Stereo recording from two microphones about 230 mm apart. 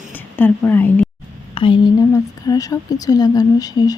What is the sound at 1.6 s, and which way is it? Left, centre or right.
Speech, left.